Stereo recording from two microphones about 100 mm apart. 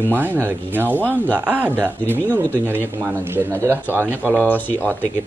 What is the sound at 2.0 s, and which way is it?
Speech, 20° left (ahead or behind).